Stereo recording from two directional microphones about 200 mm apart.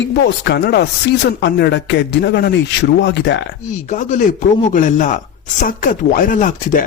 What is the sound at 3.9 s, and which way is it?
Speech, 35° left (ahead or behind).